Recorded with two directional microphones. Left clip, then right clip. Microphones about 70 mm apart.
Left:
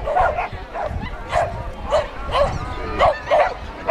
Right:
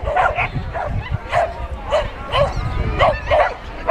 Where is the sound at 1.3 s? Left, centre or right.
Centre.